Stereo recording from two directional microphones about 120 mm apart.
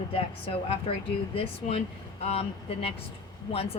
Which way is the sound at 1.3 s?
55° left (ahead or behind).